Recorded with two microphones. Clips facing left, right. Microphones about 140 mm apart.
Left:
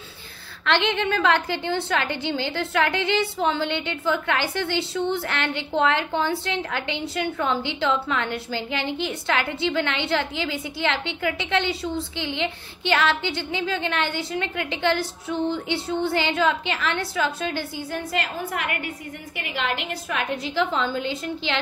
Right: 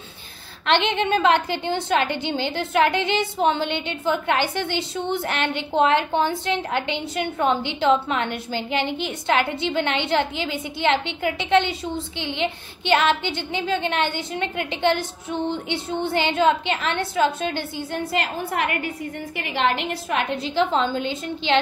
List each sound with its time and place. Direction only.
0.7 s a woman's voice: 20° right (ahead or behind)